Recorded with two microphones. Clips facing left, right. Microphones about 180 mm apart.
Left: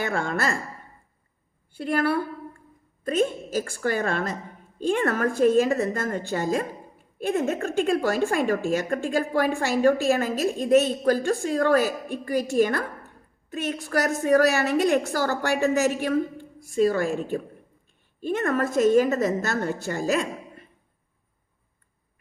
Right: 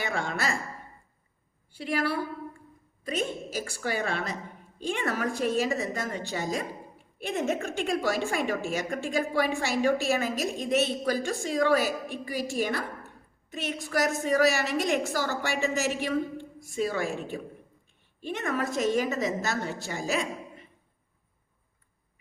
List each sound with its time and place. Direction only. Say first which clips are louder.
0.0 s a woman's voice: left 4 dB; 50° left (ahead or behind)
1.7 s a woman's voice: left 5 dB; 55° left (ahead or behind)